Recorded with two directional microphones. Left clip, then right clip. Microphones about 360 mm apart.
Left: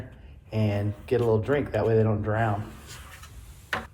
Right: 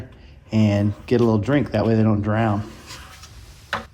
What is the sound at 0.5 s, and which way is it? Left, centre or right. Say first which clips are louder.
Speech: right 8 dB; centre.